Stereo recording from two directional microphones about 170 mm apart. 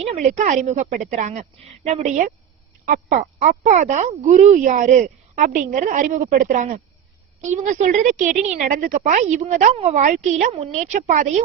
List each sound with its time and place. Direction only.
0.0 s speech: 40° right (ahead or behind)